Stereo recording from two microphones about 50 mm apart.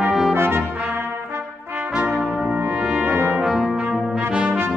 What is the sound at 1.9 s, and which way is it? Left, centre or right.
Brass instrument, right.